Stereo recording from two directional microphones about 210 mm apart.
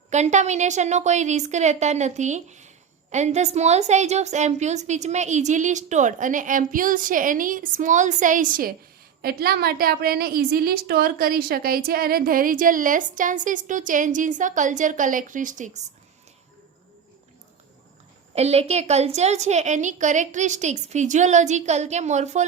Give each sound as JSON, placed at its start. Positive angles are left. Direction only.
{"t": 0.1, "sound": "a woman's voice", "side_deg": -35}
{"t": 18.3, "sound": "a woman's voice", "side_deg": -30}